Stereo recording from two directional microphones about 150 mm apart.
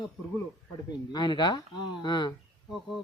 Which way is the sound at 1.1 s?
30° left (ahead or behind).